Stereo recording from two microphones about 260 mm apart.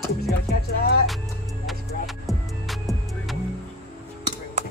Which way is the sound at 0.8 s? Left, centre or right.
Left.